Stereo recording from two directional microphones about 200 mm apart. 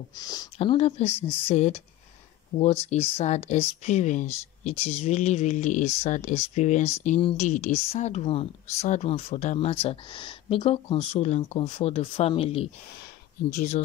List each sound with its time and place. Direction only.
0.1 s speech: 20° left (ahead or behind)
0.6 s speech: 30° left (ahead or behind)
2.5 s speech: 20° left (ahead or behind)
3.2 s speech: 35° left (ahead or behind)